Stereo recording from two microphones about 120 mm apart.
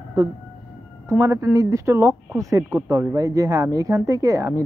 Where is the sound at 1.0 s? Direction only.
25° right (ahead or behind).